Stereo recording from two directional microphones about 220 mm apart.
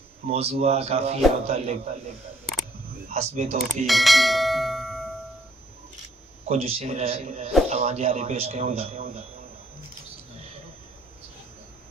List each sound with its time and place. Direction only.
0.3 s speech: 30° right (ahead or behind)
3.1 s speech: 30° right (ahead or behind)
3.8 s speech: centre (ahead or behind)
6.5 s speech: 25° right (ahead or behind)